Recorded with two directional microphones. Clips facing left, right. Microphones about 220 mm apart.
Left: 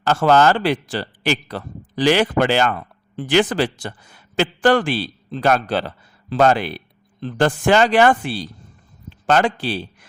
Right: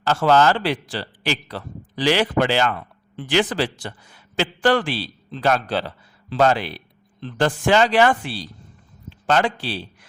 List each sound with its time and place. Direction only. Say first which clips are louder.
0.0 s a man's voice: left 2 dB; 50° left (ahead or behind)